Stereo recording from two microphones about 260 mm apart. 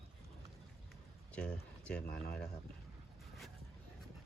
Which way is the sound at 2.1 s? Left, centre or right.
Left.